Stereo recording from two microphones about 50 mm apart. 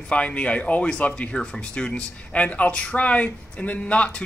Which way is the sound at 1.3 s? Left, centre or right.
Centre.